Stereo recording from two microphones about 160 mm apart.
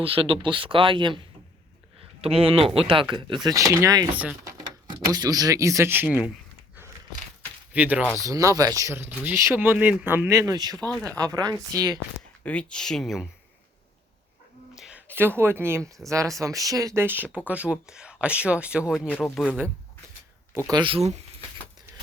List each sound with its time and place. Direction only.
0.0 s speech: 35° right (ahead or behind); by 6.3 s 5° right (ahead or behind)
7.7 s speech: 10° right (ahead or behind)
8.2 s speech: 20° right (ahead or behind)
10.9 s speech: 5° left (ahead or behind)
11.2 s speech: 20° right (ahead or behind)
12.4 s speech: 10° left (ahead or behind)
14.8 s speech: 5° right (ahead or behind)
19.0 s speech: 5° left (ahead or behind)
20.7 s speech: 30° right (ahead or behind)